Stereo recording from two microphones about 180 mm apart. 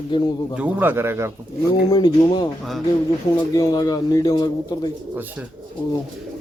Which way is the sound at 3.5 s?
20° left (ahead or behind).